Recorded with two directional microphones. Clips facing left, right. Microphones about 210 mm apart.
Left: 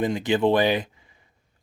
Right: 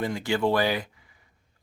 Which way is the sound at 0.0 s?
20° left (ahead or behind).